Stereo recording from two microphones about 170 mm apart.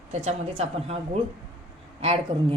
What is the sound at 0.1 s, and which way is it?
A woman's voice, 40° right (ahead or behind).